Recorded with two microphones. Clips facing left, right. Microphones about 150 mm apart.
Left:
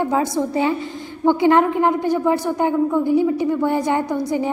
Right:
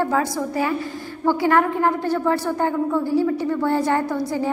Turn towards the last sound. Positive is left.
turn(degrees=20)  # may be behind; listen again after turning